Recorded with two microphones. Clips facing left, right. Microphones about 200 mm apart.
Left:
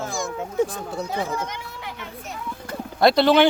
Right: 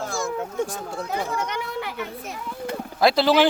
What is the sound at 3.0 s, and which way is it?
Speech, centre (ahead or behind).